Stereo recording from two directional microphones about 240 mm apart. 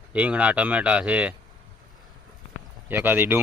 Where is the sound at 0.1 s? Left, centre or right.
Centre.